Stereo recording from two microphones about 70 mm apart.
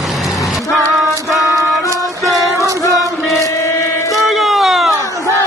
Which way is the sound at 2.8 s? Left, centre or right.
Left.